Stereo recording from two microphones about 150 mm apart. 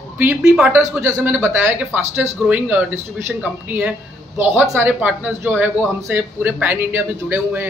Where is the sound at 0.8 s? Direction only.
20° right (ahead or behind).